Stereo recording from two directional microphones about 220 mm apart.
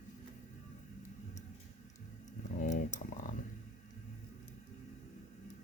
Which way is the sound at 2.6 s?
35° left (ahead or behind).